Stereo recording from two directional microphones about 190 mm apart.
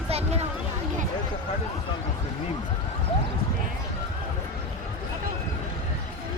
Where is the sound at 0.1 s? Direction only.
30° right (ahead or behind).